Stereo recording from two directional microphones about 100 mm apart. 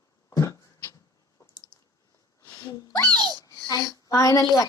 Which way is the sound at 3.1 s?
45° right (ahead or behind).